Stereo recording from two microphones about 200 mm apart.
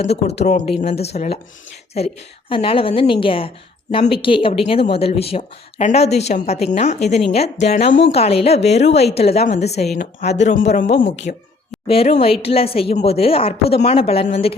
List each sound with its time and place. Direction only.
0.0 s speech: 30° left (ahead or behind)
2.5 s speech: 25° left (ahead or behind); by 11.4 s 45° left (ahead or behind)
11.9 s speech: 30° left (ahead or behind)